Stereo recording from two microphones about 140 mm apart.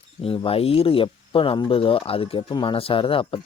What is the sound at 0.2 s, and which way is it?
Speech, 40° left (ahead or behind).